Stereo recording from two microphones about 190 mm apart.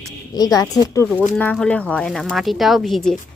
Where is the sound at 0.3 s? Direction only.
20° left (ahead or behind).